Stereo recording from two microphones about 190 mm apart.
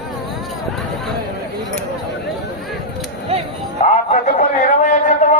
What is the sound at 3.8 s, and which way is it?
Music, 40° left (ahead or behind).